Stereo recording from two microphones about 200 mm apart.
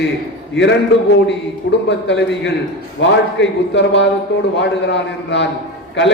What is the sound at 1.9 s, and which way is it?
A man's voice, 60° left (ahead or behind).